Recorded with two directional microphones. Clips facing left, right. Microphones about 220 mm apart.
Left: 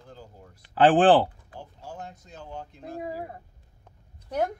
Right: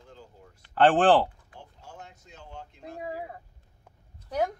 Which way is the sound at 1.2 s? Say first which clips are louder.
Left 2 dB; 35° left (ahead or behind).